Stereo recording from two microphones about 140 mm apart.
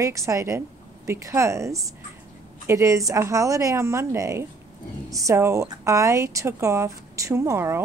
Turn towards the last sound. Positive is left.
turn(degrees=-20)  # may be behind; listen again after turning